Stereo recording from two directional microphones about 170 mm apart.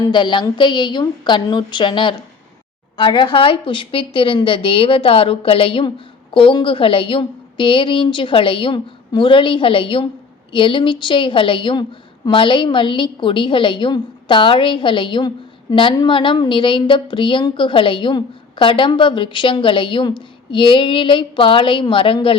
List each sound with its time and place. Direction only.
0.0 s a woman's voice: 25° left (ahead or behind)